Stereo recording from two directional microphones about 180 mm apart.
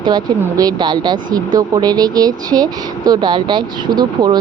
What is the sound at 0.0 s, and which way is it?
Speech, 25° right (ahead or behind).